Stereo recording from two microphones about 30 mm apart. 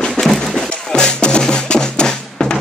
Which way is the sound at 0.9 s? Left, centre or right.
Left.